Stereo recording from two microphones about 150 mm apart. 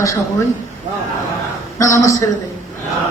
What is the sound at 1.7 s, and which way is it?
Speech, 20° left (ahead or behind).